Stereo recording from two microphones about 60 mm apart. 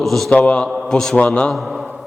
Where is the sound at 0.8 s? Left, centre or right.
Centre.